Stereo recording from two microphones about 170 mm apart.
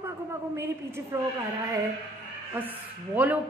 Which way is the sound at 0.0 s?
15° right (ahead or behind).